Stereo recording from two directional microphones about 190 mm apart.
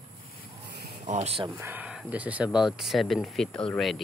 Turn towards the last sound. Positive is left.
turn(degrees=0)  # may be behind; listen again after turning